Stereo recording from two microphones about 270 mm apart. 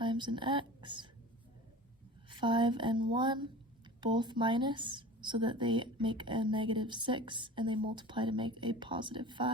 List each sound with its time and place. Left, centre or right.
0.0 s speech: centre
2.3 s speech: centre